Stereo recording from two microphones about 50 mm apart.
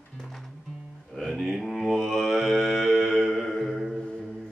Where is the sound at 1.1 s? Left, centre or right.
Centre.